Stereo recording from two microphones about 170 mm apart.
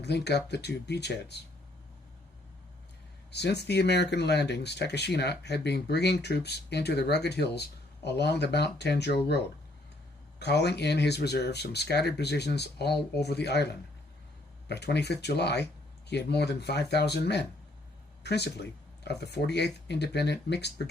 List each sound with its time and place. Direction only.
0.0 s speech: 80° left
3.3 s speech: 75° left (ahead or behind)
10.4 s speech: 75° left (ahead or behind)